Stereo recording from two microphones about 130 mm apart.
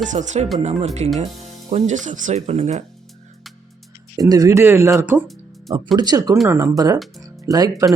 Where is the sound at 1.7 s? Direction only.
70° right (ahead or behind).